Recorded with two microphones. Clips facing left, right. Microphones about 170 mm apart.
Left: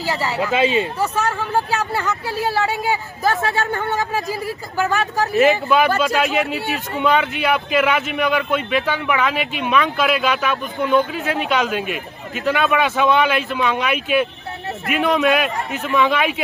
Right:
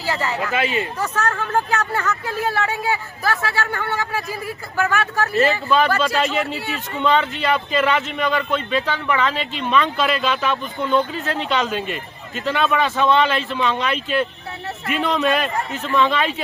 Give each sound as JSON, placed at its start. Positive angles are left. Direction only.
{"t": 0.0, "sound": "speech", "side_deg": 15}